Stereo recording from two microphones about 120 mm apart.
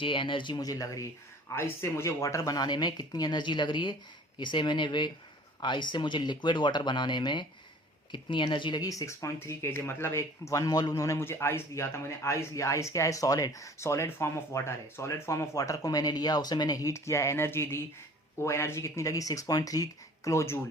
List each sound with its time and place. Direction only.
0.0 s speech: 45° left (ahead or behind)
1.5 s speech: 20° left (ahead or behind)